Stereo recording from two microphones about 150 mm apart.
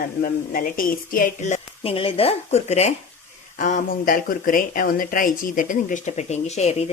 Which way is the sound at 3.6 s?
60° left (ahead or behind).